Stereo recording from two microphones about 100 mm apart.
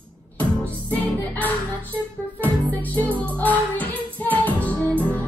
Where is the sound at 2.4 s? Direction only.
15° left (ahead or behind).